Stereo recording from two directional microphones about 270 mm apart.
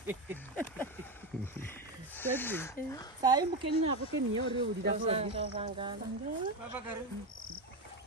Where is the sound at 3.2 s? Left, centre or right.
Centre.